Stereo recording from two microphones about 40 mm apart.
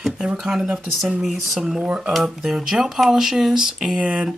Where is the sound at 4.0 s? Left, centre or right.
Right.